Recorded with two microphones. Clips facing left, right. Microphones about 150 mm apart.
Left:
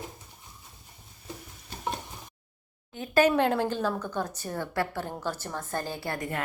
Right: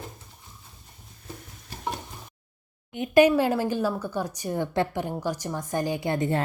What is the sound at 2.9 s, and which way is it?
A woman's voice, 15° right (ahead or behind).